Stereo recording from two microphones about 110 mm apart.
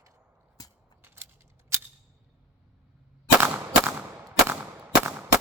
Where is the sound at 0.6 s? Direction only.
35° left (ahead or behind).